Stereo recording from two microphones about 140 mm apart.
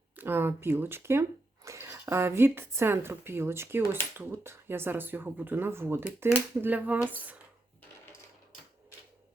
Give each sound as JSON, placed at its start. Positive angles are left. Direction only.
{"t": 0.2, "sound": "speech", "side_deg": -15}